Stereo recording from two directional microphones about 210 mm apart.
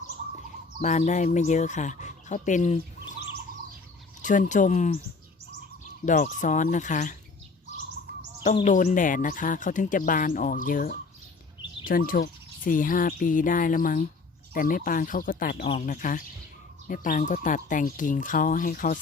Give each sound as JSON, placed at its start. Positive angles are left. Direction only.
{"t": 0.8, "sound": "speech", "side_deg": 35}
{"t": 4.2, "sound": "speech", "side_deg": 35}
{"t": 6.1, "sound": "speech", "side_deg": 40}
{"t": 8.6, "sound": "speech", "side_deg": 35}